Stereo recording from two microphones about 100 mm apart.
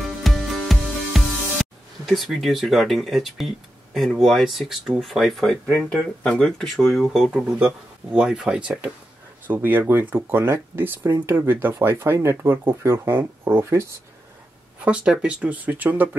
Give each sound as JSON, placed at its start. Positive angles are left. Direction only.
{"t": 0.2, "sound": "music", "side_deg": 0}
{"t": 9.5, "sound": "speech", "side_deg": -20}
{"t": 14.9, "sound": "speech", "side_deg": -10}